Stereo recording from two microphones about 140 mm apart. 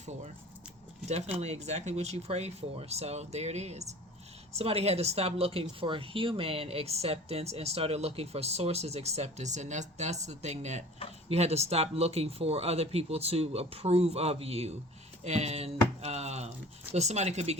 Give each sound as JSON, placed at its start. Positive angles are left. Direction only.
{"t": 1.4, "sound": "speech", "side_deg": -50}
{"t": 15.2, "sound": "a sound", "side_deg": -50}
{"t": 16.9, "sound": "speech", "side_deg": -50}